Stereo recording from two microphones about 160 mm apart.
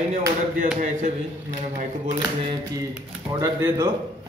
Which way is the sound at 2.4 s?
30° right (ahead or behind).